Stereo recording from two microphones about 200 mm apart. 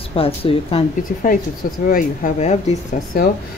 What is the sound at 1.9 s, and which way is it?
Speech, 40° left (ahead or behind).